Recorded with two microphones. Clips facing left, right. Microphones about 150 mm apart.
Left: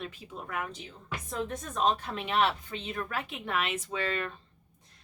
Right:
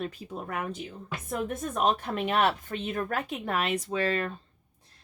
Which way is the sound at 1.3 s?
55° right (ahead or behind).